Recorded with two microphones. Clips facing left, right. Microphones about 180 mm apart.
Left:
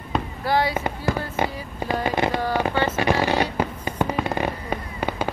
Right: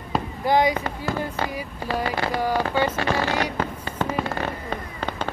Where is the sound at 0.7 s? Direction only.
15° left (ahead or behind).